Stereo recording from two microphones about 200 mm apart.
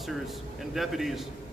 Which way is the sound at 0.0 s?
Centre (ahead or behind).